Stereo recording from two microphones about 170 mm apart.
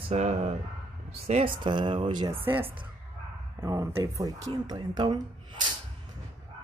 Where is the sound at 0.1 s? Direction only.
40° right (ahead or behind).